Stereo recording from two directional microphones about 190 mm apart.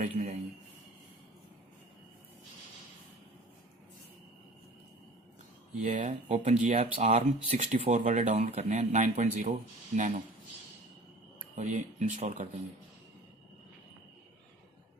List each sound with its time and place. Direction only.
0.0 s a man's voice: 35° right (ahead or behind)
5.8 s speech: 40° right (ahead or behind)
11.5 s speech: 40° right (ahead or behind)